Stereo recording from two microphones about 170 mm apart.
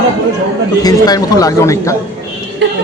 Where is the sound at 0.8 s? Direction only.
20° left (ahead or behind).